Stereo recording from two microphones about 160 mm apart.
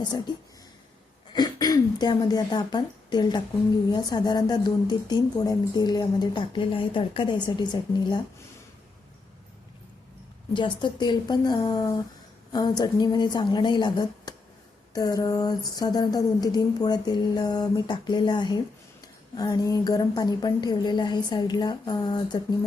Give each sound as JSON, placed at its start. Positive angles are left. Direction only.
{"t": 1.3, "sound": "speech", "side_deg": 25}
{"t": 10.5, "sound": "speech", "side_deg": 30}